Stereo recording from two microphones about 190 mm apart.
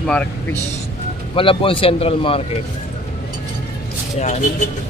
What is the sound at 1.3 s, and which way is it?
A man's voice, 30° left (ahead or behind).